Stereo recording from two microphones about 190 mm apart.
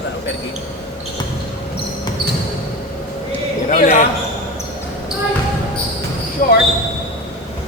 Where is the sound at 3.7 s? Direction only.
40° left (ahead or behind).